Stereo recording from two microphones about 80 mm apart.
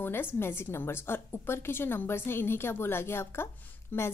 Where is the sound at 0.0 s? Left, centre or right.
Left.